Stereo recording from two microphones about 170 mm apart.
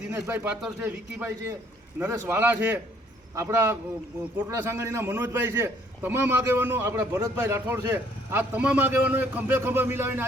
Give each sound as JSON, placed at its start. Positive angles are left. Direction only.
{"t": 0.1, "sound": "a man's voice", "side_deg": -10}